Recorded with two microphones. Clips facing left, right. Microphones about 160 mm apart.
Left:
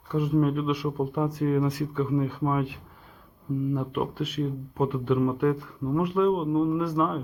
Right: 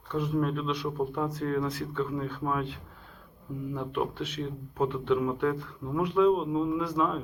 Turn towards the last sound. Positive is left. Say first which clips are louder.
# left 3 dB
turn(degrees=5)  # may be behind; listen again after turning